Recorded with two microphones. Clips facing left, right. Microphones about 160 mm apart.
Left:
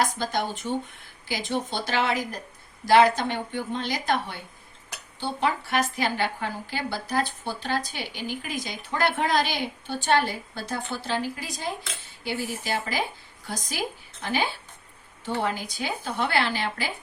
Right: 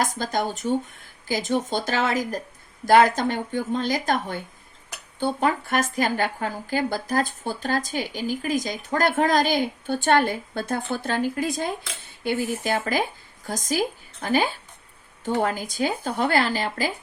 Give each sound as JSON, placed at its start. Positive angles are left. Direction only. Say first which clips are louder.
{"t": 0.0, "sound": "a woman's voice", "louder": "right 1 dB", "side_deg": -45}